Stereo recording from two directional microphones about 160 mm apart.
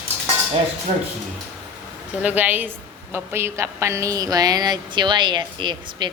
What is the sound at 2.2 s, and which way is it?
A woman's voice, 10° right (ahead or behind).